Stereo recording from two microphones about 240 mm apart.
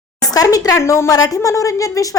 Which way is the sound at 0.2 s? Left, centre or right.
Centre.